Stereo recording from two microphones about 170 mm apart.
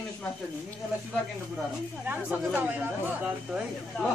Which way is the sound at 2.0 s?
10° right (ahead or behind).